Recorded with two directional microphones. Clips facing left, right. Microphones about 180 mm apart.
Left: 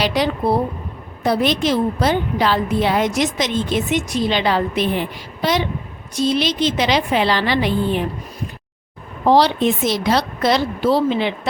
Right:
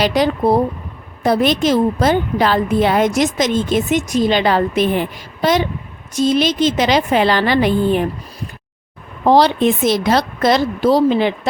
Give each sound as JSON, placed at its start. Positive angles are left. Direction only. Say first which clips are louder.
{"t": 0.0, "sound": "a woman's voice", "louder": "right 4 dB", "side_deg": -45}
{"t": 9.2, "sound": "a woman's voice", "louder": "right 2 dB", "side_deg": -50}